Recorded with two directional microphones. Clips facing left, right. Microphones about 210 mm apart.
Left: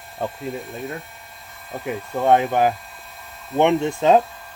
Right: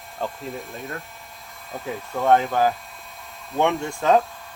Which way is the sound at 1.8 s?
15° left (ahead or behind).